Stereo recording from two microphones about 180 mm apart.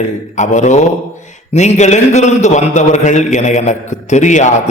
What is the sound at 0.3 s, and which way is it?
A man's voice, 40° left (ahead or behind).